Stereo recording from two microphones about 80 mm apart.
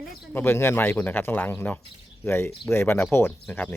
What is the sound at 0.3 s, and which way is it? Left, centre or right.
A man's voice, left.